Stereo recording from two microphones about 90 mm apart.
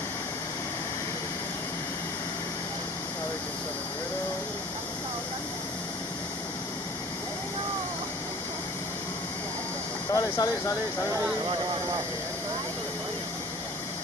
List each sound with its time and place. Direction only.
10.1 s speech: 45° left (ahead or behind)